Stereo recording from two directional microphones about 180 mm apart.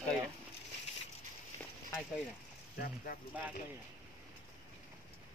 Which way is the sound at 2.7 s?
55° left (ahead or behind).